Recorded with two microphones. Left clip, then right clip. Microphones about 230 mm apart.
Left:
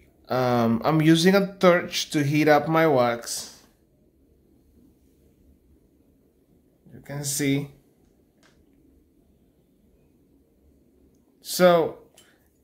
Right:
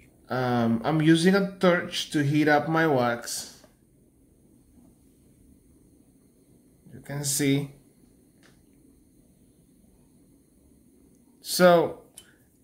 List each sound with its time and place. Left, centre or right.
0.3 s speech: centre
6.9 s speech: centre
11.4 s speech: centre